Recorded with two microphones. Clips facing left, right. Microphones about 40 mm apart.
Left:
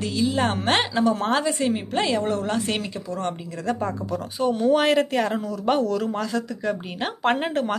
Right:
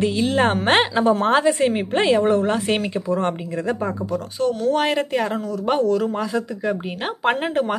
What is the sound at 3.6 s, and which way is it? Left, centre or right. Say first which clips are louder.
Speech: even; centre.